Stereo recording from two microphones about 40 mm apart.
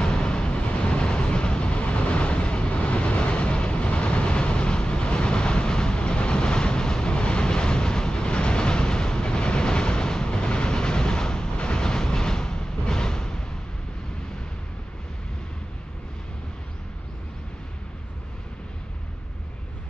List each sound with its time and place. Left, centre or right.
0.0 s vehicle: left